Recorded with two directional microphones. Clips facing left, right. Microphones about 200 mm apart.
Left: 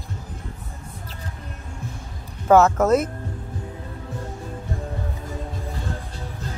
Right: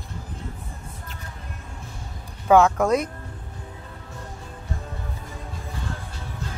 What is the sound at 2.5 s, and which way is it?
Speech, 5° left (ahead or behind).